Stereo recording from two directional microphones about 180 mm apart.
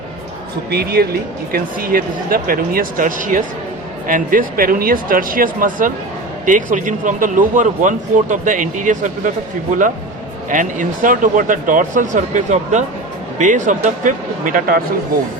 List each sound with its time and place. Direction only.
0.7 s a man's voice: 60° right (ahead or behind)
10.5 s a man's voice: 45° right (ahead or behind)